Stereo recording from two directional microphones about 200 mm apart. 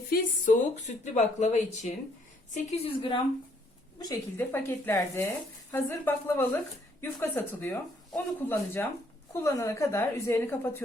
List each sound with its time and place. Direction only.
0.1 s a woman's voice: 40° left (ahead or behind)
3.9 s speech: 15° left (ahead or behind)